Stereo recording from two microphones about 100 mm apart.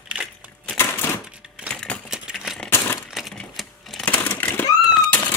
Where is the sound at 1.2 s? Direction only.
10° right (ahead or behind).